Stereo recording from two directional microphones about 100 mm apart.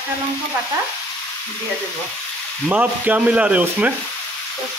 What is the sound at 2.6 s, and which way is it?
Frying, 15° right (ahead or behind).